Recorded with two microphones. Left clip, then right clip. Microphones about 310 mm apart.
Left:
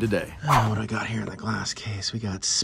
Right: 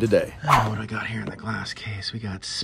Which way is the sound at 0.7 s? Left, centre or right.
Centre.